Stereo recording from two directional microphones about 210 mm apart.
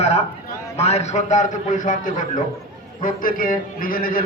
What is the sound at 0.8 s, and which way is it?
A man's voice, 30° left (ahead or behind).